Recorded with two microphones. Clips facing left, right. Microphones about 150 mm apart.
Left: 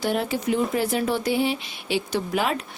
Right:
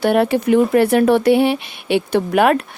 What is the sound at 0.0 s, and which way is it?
Speech, 65° right (ahead or behind).